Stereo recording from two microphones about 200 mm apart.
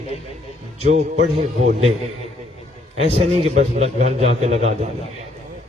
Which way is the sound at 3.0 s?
30° right (ahead or behind).